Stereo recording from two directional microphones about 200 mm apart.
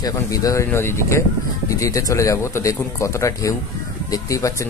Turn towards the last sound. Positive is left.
turn(degrees=15)  # may be behind; listen again after turning